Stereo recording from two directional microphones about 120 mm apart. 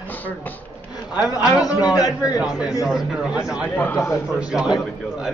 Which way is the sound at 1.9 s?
30° left (ahead or behind).